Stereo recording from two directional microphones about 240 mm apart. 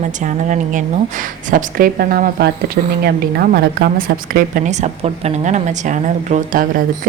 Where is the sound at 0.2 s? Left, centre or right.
Right.